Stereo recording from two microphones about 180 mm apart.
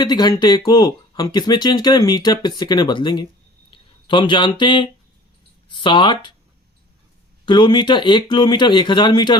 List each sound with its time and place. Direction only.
0.0 s speech: 25° left (ahead or behind)
7.4 s speech: 25° left (ahead or behind)